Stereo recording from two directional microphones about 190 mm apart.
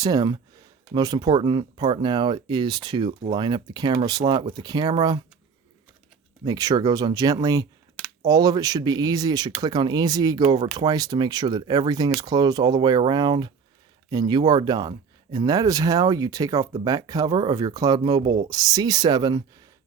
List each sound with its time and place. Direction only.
0.0 s speech: 20° right (ahead or behind)
6.4 s speech: 20° right (ahead or behind)